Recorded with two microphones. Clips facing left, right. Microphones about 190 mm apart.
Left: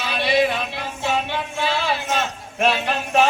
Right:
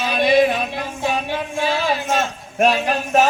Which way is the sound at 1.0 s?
45° right (ahead or behind).